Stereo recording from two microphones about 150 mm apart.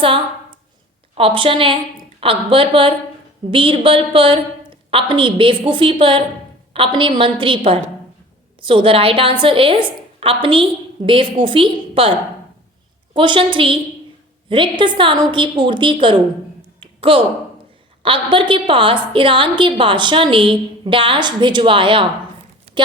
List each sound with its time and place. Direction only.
1.1 s a woman's voice: 35° right (ahead or behind)
13.1 s a woman's voice: 35° right (ahead or behind)
16.8 s finger snapping: 35° right (ahead or behind)
18.0 s a woman's voice: 35° right (ahead or behind)